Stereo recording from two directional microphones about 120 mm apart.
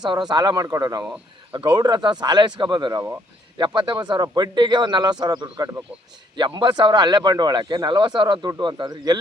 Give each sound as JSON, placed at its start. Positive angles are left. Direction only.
{"t": 0.0, "sound": "speech", "side_deg": -35}